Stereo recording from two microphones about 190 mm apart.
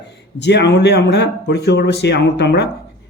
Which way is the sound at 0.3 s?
65° left (ahead or behind).